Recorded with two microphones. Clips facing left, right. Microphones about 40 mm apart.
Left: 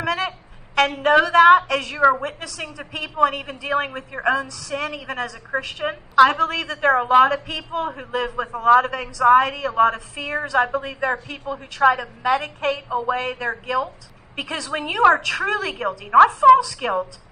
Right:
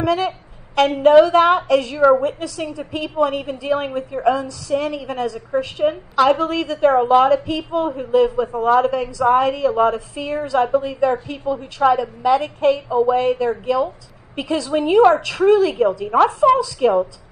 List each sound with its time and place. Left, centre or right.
0.0 s a woman's voice: left